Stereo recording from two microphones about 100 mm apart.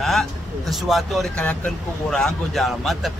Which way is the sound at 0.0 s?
Centre (ahead or behind).